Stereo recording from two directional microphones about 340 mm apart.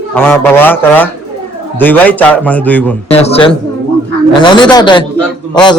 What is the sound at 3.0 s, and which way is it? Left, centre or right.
Speech, centre.